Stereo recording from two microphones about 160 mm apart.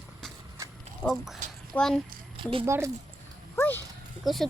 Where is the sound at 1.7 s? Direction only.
10° left (ahead or behind).